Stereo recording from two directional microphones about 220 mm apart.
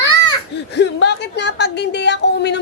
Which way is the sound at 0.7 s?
50° left (ahead or behind).